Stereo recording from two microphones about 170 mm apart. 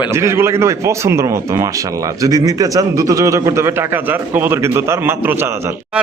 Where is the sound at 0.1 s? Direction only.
15° right (ahead or behind).